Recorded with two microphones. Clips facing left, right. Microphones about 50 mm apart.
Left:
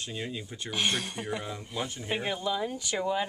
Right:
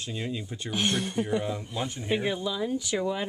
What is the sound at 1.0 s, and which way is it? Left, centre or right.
Speech, left.